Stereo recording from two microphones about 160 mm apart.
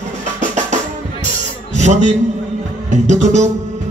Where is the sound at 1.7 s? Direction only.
45° right (ahead or behind).